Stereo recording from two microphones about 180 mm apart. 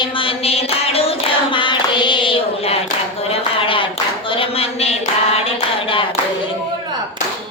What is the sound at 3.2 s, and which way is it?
Clapping, 30° left (ahead or behind).